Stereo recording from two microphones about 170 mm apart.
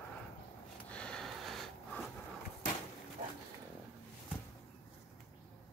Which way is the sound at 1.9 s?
10° left (ahead or behind).